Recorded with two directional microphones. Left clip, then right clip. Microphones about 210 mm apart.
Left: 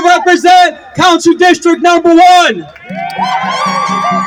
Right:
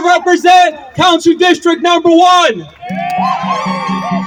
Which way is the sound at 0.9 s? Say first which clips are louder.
Left 2 dB; 40° left (ahead or behind).